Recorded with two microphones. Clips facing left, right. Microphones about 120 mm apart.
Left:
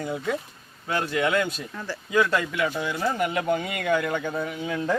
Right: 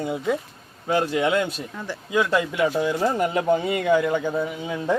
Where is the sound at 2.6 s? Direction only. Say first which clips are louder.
Right 5 dB; 30° right (ahead or behind).